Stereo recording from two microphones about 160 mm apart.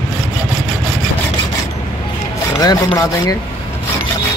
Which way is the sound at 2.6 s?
25° left (ahead or behind).